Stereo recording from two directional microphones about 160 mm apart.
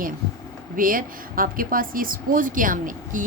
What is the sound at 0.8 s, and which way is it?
A woman's voice, 60° right (ahead or behind).